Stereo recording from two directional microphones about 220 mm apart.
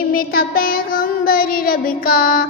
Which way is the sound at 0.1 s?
40° left (ahead or behind).